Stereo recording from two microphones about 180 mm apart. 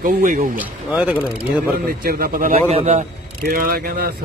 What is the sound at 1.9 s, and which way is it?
Speech, 55° right (ahead or behind).